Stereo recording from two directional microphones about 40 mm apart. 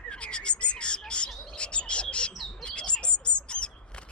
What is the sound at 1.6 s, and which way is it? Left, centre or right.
Bird, left.